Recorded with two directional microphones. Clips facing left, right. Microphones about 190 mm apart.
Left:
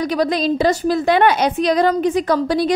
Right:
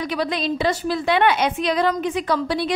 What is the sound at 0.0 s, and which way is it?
A woman's voice, 40° left (ahead or behind).